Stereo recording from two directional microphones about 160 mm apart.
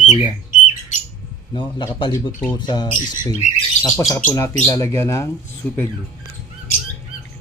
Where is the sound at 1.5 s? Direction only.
30° left (ahead or behind); by 5.8 s 10° left (ahead or behind).